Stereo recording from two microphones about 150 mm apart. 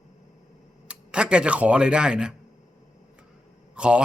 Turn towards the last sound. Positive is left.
turn(degrees=-5)  # may be behind; listen again after turning